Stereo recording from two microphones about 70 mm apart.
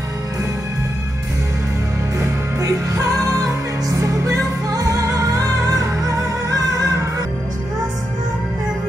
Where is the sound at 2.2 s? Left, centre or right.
Right.